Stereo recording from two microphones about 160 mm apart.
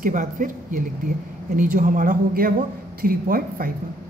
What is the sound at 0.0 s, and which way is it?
A woman's voice, 55° right (ahead or behind).